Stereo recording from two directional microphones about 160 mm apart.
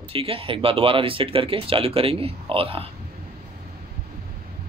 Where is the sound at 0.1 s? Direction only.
35° right (ahead or behind).